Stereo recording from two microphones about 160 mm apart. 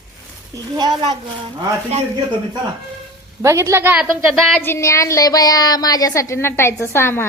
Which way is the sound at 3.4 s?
20° right (ahead or behind).